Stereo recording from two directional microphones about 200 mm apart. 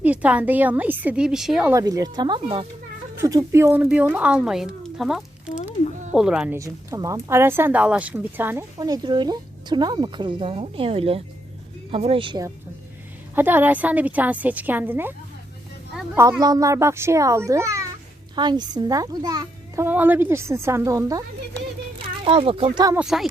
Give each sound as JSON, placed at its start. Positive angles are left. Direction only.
{"t": 0.0, "sound": "a child's voice", "side_deg": -5}
{"t": 1.7, "sound": "a woman's voice", "side_deg": -15}
{"t": 6.6, "sound": "a woman's voice", "side_deg": -15}
{"t": 13.3, "sound": "a child's voice", "side_deg": -10}
{"t": 16.1, "sound": "a child's voice", "side_deg": -15}
{"t": 21.9, "sound": "speech", "side_deg": -25}
{"t": 23.0, "sound": "a woman's voice", "side_deg": 0}